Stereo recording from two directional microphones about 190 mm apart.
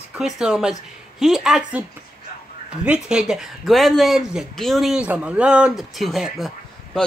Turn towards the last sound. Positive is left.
turn(degrees=0)  # may be behind; listen again after turning